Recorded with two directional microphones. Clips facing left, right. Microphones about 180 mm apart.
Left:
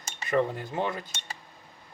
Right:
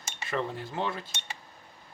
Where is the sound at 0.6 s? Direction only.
20° left (ahead or behind).